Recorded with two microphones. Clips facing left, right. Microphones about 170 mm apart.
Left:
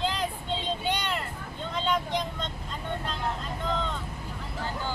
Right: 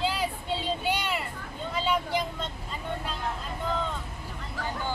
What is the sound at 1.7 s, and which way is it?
Speech, 5° right (ahead or behind).